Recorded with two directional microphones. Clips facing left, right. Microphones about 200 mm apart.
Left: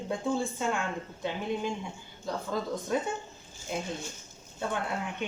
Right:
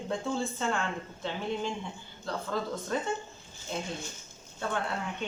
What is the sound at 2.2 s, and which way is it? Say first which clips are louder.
A woman's voice: left 1 dB; 10° left (ahead or behind).